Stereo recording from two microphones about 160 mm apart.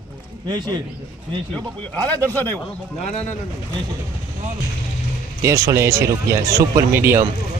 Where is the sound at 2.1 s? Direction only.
10° left (ahead or behind).